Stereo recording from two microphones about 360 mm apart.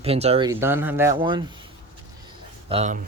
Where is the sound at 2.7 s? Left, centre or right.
Centre.